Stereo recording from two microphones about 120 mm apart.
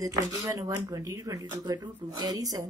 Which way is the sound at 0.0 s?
25° right (ahead or behind).